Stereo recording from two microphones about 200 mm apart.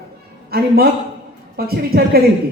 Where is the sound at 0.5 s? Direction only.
50° right (ahead or behind).